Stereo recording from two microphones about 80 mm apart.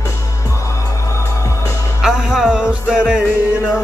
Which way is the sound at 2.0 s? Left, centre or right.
Centre.